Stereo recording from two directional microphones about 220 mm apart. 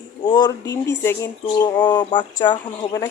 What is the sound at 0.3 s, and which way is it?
Speech, 20° left (ahead or behind).